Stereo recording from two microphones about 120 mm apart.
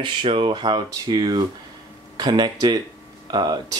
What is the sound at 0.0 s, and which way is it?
Speech, 45° right (ahead or behind).